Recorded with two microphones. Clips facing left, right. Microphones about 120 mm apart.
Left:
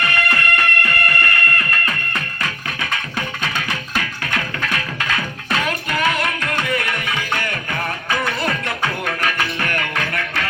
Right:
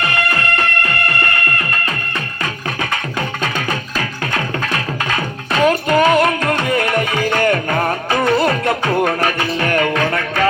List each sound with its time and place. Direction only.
0.0 s music: 30° right (ahead or behind)